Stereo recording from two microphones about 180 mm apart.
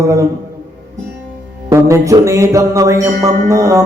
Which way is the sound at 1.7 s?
15° right (ahead or behind).